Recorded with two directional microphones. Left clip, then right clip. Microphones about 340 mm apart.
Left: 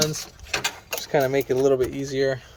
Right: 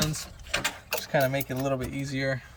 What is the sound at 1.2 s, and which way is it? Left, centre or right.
Speech, left.